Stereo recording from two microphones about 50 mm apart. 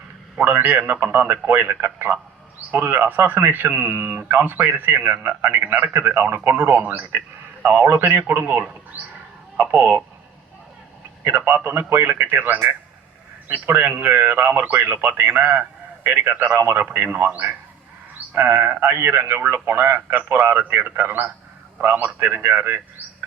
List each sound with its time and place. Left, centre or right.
0.3 s a man's voice: right
1.0 s a man's voice: right
11.3 s a man's voice: right